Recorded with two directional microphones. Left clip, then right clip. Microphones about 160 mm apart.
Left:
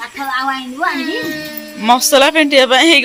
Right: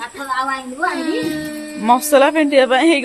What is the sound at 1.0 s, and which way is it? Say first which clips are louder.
Speech: left 1 dB; 55° right (ahead or behind).